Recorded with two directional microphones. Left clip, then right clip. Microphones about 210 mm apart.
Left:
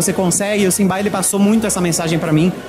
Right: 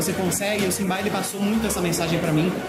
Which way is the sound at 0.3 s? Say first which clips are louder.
Left 7 dB; 50° left (ahead or behind).